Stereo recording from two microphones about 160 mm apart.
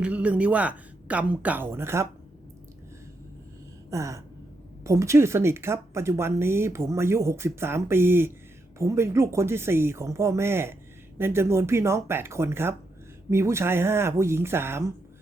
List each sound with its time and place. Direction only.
0.0 s speech: 10° right (ahead or behind)
3.8 s a sound: 20° right (ahead or behind)
4.8 s speech: 20° right (ahead or behind)